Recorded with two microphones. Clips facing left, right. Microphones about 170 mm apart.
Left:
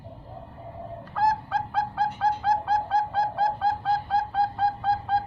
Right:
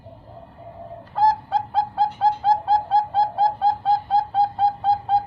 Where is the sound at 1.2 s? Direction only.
25° right (ahead or behind).